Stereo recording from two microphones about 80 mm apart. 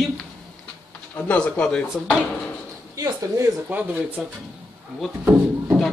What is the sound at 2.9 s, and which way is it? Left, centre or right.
Speech, right.